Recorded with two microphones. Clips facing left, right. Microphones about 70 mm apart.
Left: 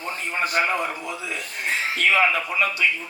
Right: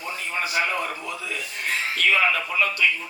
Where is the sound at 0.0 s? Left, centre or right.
Left.